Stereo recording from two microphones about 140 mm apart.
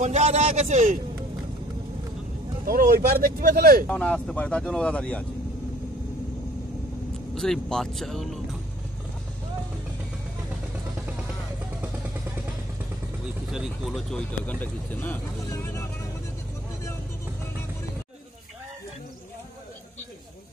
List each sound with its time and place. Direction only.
0.0 s a man's voice: 55° right (ahead or behind)
2.6 s speech: 90° right
3.8 s speech: 10° left (ahead or behind)
7.3 s speech: 5° left (ahead or behind)
13.5 s speech: centre (ahead or behind)
14.4 s speech: 10° left (ahead or behind)